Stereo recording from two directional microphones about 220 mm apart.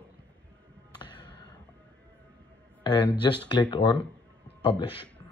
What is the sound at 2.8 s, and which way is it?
Speech, 20° left (ahead or behind).